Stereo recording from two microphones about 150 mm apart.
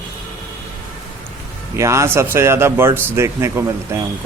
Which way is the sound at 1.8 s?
20° right (ahead or behind).